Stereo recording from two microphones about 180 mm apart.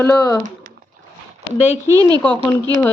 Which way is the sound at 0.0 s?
10° left (ahead or behind).